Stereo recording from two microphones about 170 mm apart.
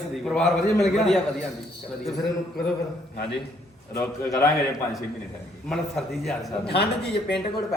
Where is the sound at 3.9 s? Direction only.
20° left (ahead or behind).